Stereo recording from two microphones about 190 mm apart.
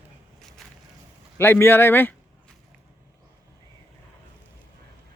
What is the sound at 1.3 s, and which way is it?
Speech, 10° left (ahead or behind).